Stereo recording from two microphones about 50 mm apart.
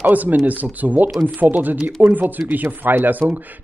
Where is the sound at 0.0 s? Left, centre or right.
Right.